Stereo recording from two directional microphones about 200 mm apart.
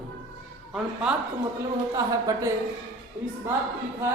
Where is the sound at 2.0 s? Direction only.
15° right (ahead or behind).